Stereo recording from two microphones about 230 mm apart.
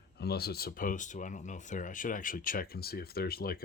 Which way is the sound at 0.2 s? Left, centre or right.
Left.